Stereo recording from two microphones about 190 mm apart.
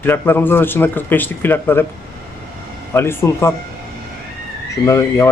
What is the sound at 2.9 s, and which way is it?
Speech, 15° left (ahead or behind).